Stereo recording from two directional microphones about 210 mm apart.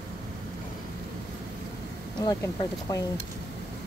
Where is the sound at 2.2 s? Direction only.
15° left (ahead or behind).